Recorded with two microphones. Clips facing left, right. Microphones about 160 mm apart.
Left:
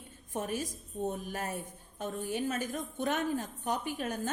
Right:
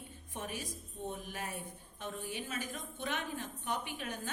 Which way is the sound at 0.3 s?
45° left (ahead or behind).